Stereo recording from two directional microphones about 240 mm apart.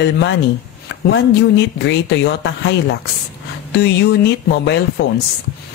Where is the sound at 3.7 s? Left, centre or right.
Left.